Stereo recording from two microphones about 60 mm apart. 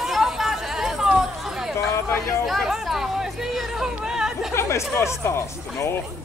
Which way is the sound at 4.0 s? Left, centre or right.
Centre.